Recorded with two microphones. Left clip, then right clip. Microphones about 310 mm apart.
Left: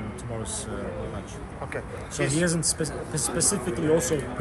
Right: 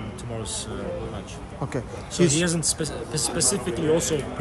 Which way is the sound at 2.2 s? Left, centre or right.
Right.